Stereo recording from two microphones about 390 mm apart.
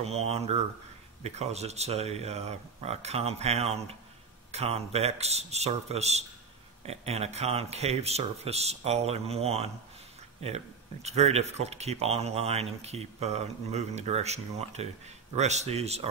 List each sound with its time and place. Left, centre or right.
0.0 s speech: centre